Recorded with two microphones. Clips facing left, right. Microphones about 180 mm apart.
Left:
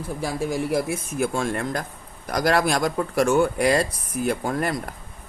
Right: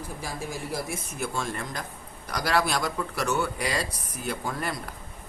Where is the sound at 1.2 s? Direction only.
55° left (ahead or behind).